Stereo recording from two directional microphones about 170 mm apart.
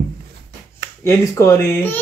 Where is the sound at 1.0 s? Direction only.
15° left (ahead or behind).